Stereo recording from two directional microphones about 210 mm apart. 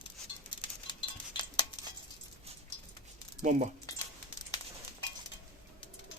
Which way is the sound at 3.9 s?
15° left (ahead or behind).